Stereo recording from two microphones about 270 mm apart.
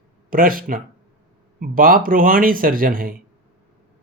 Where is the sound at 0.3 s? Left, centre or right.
Right.